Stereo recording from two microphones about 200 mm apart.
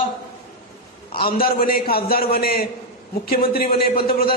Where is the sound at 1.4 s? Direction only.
45° left (ahead or behind).